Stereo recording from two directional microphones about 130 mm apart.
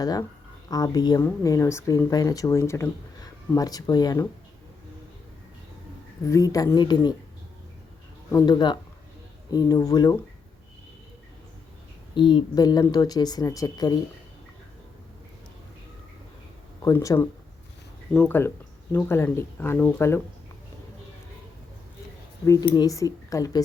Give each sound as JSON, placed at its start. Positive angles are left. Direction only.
{"t": 0.0, "sound": "speech", "side_deg": 30}
{"t": 6.2, "sound": "speech", "side_deg": 25}
{"t": 8.3, "sound": "a woman's voice", "side_deg": 30}
{"t": 12.1, "sound": "a woman's voice", "side_deg": 40}
{"t": 16.8, "sound": "speech", "side_deg": 25}
{"t": 22.4, "sound": "speech", "side_deg": 30}